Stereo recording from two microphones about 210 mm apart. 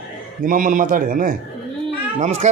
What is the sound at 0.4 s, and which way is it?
A man's voice, 40° right (ahead or behind).